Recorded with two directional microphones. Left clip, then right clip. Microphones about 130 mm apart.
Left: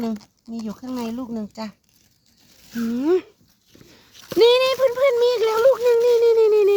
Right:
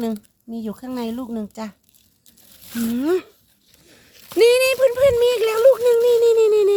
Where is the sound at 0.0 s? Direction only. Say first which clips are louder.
Right 2 dB; 35° right (ahead or behind).